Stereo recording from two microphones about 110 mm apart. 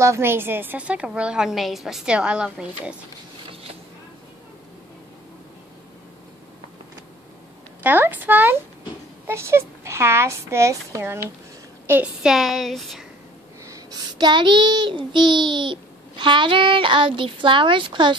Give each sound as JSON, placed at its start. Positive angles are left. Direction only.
{"t": 0.0, "sound": "a woman's voice", "side_deg": -25}
{"t": 7.8, "sound": "a woman's voice", "side_deg": -15}
{"t": 11.9, "sound": "a woman's voice", "side_deg": -10}
{"t": 14.1, "sound": "a child's voice", "side_deg": -45}